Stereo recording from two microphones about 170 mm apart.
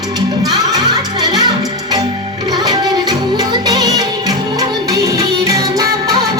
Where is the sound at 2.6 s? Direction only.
25° right (ahead or behind).